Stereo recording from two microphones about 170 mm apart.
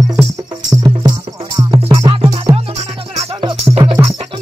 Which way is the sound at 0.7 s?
20° right (ahead or behind).